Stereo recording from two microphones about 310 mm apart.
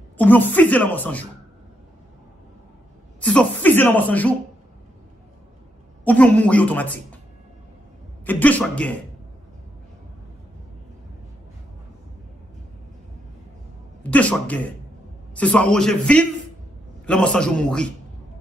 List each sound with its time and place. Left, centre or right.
0.2 s speech: centre
3.2 s speech: centre
6.0 s speech: centre
8.3 s speech: centre
14.0 s speech: centre